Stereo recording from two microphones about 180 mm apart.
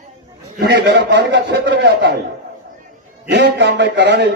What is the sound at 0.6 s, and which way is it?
A man's voice, 65° right (ahead or behind).